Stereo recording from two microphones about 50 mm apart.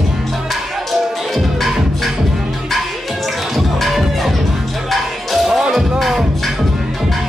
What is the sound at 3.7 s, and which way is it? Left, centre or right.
Music, centre.